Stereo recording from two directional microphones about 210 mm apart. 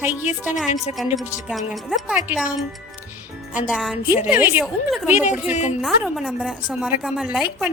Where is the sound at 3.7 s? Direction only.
Centre (ahead or behind).